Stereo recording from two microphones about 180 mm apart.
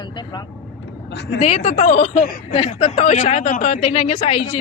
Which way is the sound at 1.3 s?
35° left (ahead or behind).